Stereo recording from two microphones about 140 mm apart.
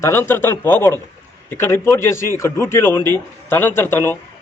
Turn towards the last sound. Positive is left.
turn(degrees=15)  # may be behind; listen again after turning